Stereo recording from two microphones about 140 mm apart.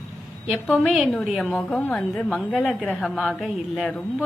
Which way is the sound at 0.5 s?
Centre (ahead or behind).